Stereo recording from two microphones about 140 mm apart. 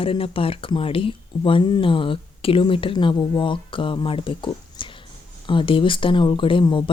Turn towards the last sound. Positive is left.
turn(degrees=35)  # may be behind; listen again after turning